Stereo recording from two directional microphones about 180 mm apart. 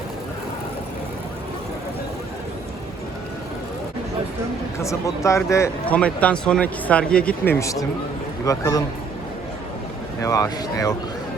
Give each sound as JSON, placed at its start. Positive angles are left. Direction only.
{"t": 4.8, "sound": "speech", "side_deg": 15}
{"t": 10.2, "sound": "speech", "side_deg": 20}